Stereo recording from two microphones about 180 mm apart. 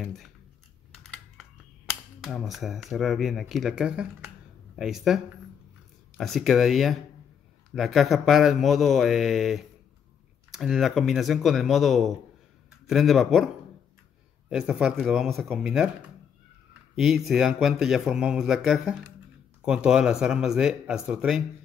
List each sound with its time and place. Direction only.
0.0 s speech: centre (ahead or behind)
1.0 s computer keyboard: centre (ahead or behind)
2.2 s speech: centre (ahead or behind)
14.5 s speech: 5° right (ahead or behind)